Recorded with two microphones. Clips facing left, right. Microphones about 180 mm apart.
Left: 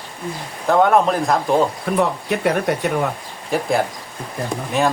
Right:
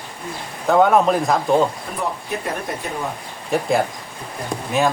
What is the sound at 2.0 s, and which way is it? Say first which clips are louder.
Speech: left 6 dB; 75° left (ahead or behind).